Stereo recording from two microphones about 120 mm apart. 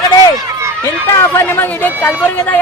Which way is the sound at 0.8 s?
20° left (ahead or behind).